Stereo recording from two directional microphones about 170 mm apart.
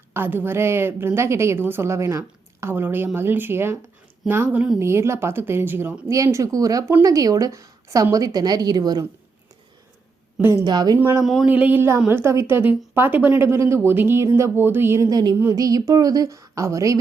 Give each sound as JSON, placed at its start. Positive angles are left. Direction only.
{"t": 0.1, "sound": "a woman's voice", "side_deg": -10}
{"t": 10.3, "sound": "a woman's voice", "side_deg": -15}